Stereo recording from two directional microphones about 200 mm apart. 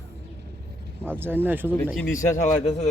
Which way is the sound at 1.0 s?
10° right (ahead or behind).